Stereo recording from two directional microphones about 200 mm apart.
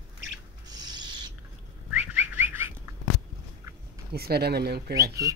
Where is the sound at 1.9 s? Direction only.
5° right (ahead or behind).